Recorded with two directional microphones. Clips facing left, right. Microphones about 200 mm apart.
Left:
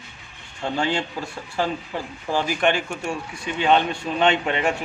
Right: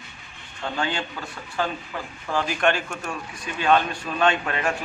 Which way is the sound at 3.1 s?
25° left (ahead or behind).